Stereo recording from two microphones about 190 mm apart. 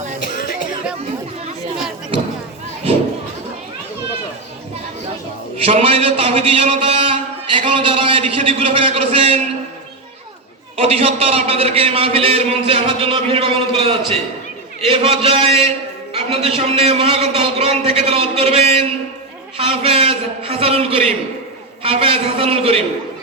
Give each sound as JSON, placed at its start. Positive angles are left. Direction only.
{"t": 0.3, "sound": "music", "side_deg": 45}
{"t": 5.5, "sound": "a man's voice", "side_deg": -30}
{"t": 10.8, "sound": "a man's voice", "side_deg": -30}